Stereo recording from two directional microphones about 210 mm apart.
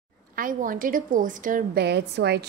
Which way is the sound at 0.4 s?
40° right (ahead or behind).